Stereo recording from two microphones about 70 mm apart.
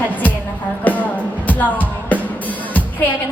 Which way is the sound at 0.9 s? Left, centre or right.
Left.